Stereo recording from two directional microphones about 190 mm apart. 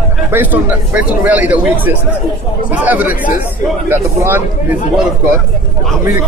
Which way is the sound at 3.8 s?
10° right (ahead or behind).